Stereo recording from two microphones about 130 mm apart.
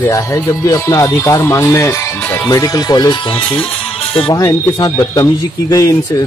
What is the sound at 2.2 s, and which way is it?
Music, 10° left (ahead or behind).